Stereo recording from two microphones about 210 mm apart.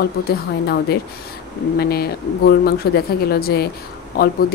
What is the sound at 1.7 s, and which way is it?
Speech, 50° left (ahead or behind).